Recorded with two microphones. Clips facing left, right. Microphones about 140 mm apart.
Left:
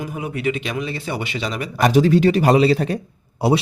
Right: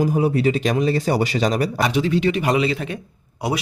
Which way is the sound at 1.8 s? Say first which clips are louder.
Left 7 dB; 40° left (ahead or behind).